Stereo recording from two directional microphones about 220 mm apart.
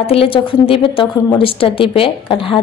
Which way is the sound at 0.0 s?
25° left (ahead or behind).